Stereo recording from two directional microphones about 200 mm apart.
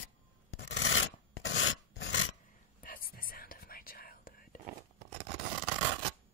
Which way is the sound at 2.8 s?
45° left (ahead or behind).